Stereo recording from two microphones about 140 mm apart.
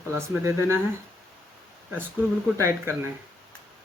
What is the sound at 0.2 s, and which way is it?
Speech, 15° right (ahead or behind).